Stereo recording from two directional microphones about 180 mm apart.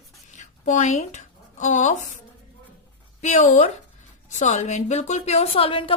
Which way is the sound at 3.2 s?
45° left (ahead or behind).